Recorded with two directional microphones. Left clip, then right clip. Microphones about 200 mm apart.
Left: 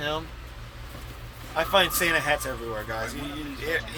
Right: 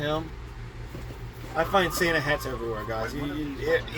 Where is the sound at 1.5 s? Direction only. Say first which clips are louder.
Left 2 dB; 25° left (ahead or behind).